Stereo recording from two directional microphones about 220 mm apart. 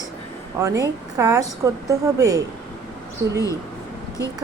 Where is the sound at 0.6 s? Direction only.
15° right (ahead or behind).